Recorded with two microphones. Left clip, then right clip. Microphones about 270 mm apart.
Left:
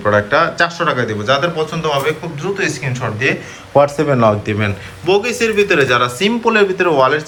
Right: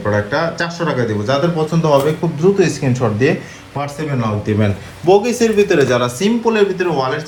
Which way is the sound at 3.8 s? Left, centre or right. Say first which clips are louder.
Left 9 dB; centre.